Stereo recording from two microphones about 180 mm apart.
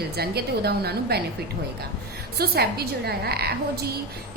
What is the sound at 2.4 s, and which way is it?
A woman's voice, 60° right (ahead or behind).